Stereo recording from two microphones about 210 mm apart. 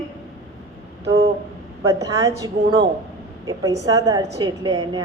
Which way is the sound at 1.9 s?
15° right (ahead or behind).